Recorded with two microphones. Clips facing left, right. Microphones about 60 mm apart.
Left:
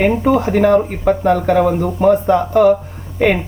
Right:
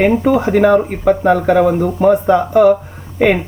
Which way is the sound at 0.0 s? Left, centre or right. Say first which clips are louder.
Right 1 dB; centre.